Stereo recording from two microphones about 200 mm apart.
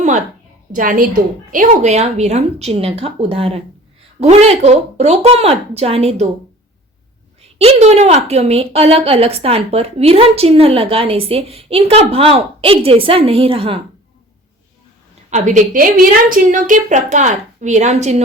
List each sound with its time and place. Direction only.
0.7 s a woman's voice: 40° right (ahead or behind)
7.6 s a woman's voice: 30° right (ahead or behind)
15.3 s a woman's voice: 40° right (ahead or behind)